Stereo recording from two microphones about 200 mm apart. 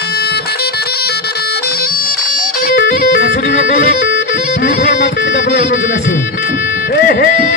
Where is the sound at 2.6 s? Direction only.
45° left (ahead or behind).